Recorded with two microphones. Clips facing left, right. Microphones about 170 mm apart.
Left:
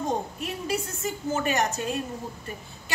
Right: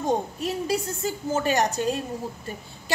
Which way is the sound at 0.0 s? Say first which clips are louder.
Right 4 dB; 35° right (ahead or behind).